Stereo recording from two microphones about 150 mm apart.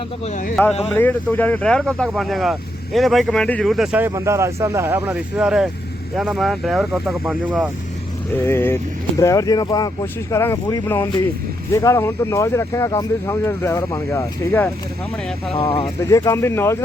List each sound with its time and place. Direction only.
0.5 s speech: 5° left (ahead or behind)
4.0 s speech: 20° right (ahead or behind)
8.4 s speech: 15° left (ahead or behind)
15.8 s speech: 20° left (ahead or behind)